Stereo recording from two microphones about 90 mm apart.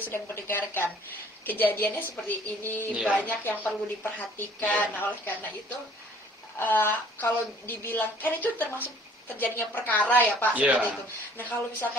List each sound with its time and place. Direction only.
0.0 s a woman's voice: 30° left (ahead or behind)
6.6 s a woman's voice: 25° left (ahead or behind)
10.5 s speech: 15° right (ahead or behind)
11.3 s a woman's voice: 20° left (ahead or behind)